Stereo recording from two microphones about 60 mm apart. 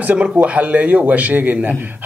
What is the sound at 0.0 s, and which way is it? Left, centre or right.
A man's voice, right.